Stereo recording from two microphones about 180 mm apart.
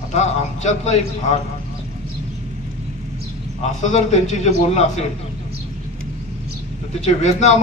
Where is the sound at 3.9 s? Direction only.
40° left (ahead or behind).